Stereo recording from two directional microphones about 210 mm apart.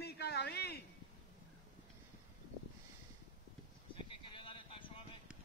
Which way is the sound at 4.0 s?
25° left (ahead or behind).